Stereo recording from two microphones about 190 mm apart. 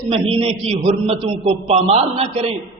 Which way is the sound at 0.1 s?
30° right (ahead or behind).